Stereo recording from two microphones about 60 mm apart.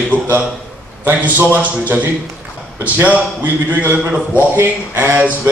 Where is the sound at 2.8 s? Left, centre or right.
Right.